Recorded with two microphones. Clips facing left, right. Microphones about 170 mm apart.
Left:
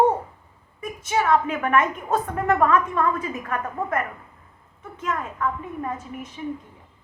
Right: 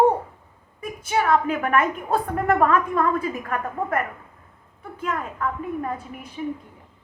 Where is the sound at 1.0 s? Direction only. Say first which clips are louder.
Even; 35° right (ahead or behind).